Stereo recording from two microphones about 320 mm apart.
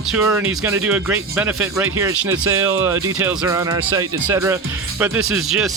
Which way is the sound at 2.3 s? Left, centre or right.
Right.